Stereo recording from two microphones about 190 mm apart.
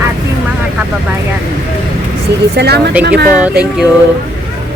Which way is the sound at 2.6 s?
60° right (ahead or behind).